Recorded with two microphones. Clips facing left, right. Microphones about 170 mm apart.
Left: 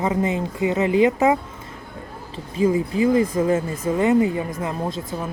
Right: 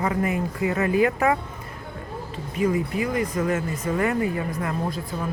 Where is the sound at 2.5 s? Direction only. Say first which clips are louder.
Left 4 dB; 25° left (ahead or behind).